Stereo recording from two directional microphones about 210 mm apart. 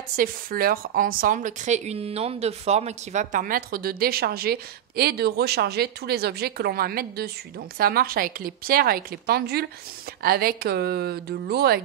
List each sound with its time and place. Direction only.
0.1 s speech: 45° right (ahead or behind)